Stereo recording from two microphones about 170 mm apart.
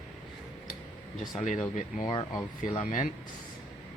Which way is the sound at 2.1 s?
30° left (ahead or behind).